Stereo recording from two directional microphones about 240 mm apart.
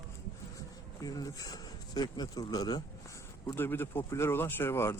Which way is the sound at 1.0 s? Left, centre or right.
Centre.